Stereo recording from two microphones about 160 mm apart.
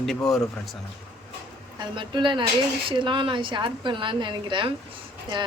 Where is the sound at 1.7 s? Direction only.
30° right (ahead or behind).